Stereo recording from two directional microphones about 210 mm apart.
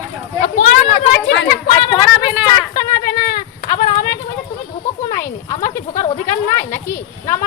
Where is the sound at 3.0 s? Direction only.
45° left (ahead or behind).